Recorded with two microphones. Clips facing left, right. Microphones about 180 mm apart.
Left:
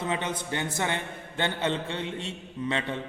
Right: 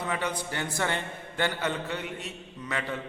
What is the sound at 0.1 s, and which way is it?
A man's voice, 25° left (ahead or behind).